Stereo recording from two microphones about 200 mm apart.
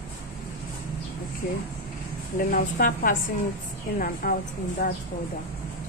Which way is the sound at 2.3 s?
45° left (ahead or behind).